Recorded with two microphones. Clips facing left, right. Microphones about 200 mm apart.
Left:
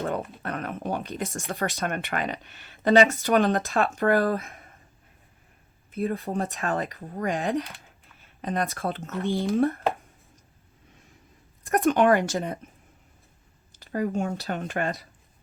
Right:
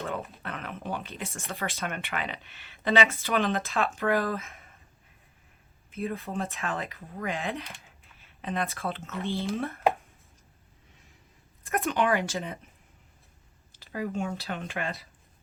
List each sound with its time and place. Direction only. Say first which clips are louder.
0.1 s speech: left 5 dB; 45° left (ahead or behind)
5.9 s speech: left 5 dB; 40° left (ahead or behind)
11.6 s speech: left 7 dB; 50° left (ahead or behind)
13.7 s speech: left 5 dB; 45° left (ahead or behind)